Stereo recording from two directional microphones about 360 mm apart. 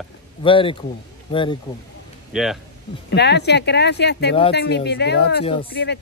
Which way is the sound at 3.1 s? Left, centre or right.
Left.